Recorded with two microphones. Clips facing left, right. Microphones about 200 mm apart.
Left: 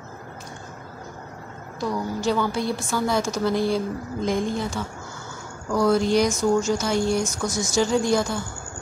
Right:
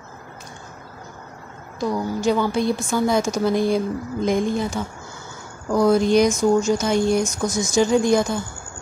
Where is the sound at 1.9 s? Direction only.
15° right (ahead or behind).